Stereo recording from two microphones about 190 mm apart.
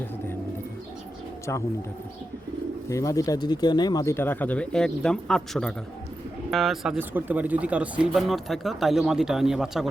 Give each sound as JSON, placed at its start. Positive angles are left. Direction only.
{"t": 2.9, "sound": "speech", "side_deg": 15}